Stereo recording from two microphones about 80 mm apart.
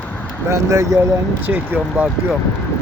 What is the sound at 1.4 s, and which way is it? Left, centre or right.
Speech, right.